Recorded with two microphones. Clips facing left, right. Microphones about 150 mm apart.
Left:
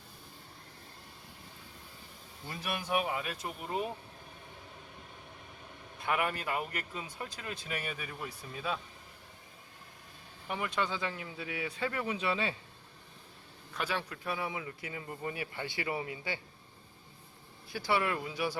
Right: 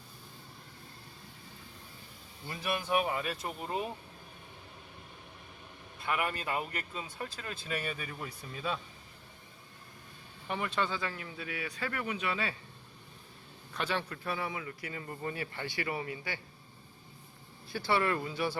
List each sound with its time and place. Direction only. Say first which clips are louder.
2.6 s speech: right 2 dB; 10° left (ahead or behind)
6.1 s speech: left 1 dB; 5° left (ahead or behind)
10.5 s speech: right 1 dB; 10° left (ahead or behind)
13.7 s speech: right 1 dB; 10° left (ahead or behind)
17.7 s speech: right 1 dB; 10° left (ahead or behind)